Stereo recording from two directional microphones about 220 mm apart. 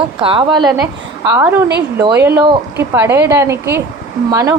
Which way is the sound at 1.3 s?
10° right (ahead or behind).